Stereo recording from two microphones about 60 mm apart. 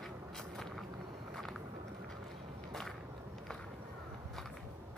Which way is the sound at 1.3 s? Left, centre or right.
Centre.